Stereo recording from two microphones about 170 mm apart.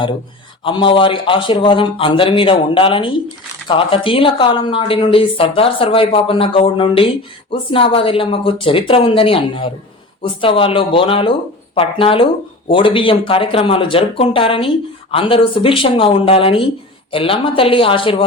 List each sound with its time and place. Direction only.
0.6 s speech: 30° left (ahead or behind)